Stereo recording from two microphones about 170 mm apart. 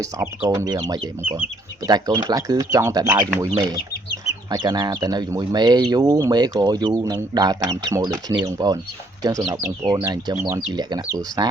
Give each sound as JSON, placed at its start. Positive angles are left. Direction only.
{"t": 0.0, "sound": "speech", "side_deg": -15}
{"t": 1.9, "sound": "speech", "side_deg": -20}
{"t": 3.5, "sound": "speech", "side_deg": -25}